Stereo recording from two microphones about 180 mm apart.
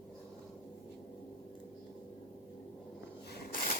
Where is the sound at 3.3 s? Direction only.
55° left (ahead or behind).